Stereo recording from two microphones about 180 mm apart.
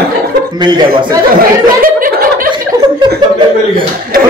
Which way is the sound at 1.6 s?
50° right (ahead or behind).